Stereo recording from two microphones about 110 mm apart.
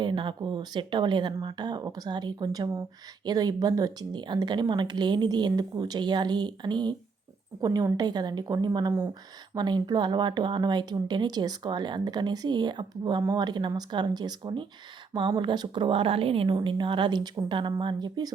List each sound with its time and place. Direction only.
0.0 s a woman's voice: 45° right (ahead or behind)